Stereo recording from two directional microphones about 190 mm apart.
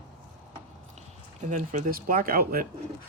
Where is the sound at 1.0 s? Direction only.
40° right (ahead or behind).